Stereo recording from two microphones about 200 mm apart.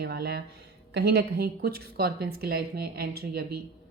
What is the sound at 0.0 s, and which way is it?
A woman's voice, 55° right (ahead or behind).